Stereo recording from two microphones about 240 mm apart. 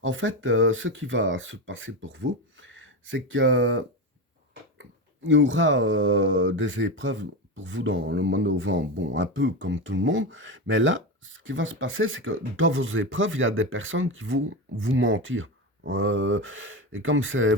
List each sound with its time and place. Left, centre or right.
0.0 s speech: right